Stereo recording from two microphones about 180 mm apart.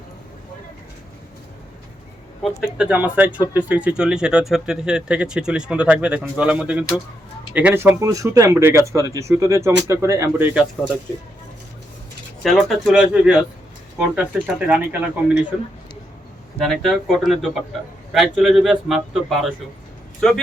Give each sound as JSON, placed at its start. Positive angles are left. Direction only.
{"t": 2.4, "sound": "speech", "side_deg": -5}
{"t": 12.4, "sound": "speech", "side_deg": 0}
{"t": 14.4, "sound": "speech", "side_deg": -10}
{"t": 16.6, "sound": "speech", "side_deg": 5}